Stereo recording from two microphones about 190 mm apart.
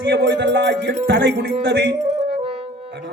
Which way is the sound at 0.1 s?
65° right (ahead or behind).